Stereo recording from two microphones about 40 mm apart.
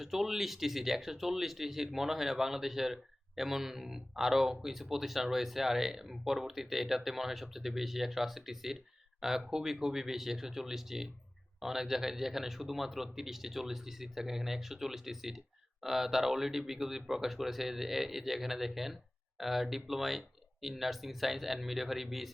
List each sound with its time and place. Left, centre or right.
0.0 s speech: centre